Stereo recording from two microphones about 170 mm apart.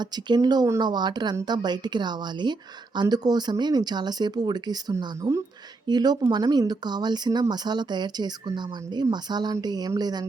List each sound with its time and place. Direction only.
0.0 s speech: 25° right (ahead or behind)